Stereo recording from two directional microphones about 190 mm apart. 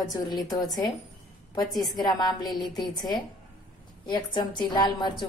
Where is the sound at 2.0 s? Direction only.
20° left (ahead or behind).